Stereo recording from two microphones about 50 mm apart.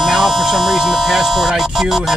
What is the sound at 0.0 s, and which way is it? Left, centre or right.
Speech, centre.